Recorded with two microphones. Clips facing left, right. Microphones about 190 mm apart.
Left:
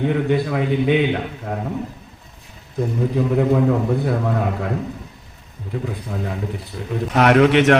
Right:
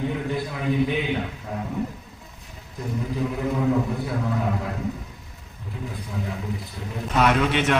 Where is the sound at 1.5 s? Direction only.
65° left (ahead or behind).